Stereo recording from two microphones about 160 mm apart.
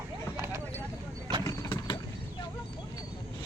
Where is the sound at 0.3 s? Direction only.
15° right (ahead or behind).